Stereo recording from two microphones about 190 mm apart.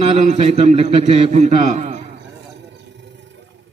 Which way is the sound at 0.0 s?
35° right (ahead or behind).